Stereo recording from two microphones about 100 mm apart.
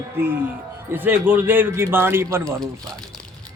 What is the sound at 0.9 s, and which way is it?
Speech, 20° right (ahead or behind).